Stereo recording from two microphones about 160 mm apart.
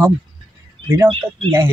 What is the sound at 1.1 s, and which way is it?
Speech, 35° right (ahead or behind).